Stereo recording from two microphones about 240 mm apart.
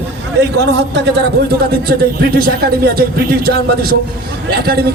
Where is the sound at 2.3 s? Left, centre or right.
Right.